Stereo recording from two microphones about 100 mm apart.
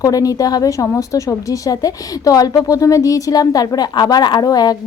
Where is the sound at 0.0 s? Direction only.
35° left (ahead or behind).